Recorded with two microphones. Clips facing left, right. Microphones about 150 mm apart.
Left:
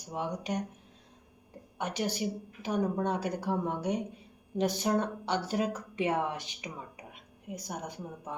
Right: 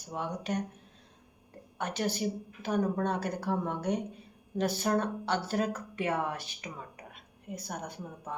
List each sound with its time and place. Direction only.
0.0 s a woman's voice: 15° left (ahead or behind)
1.8 s a woman's voice: 10° left (ahead or behind)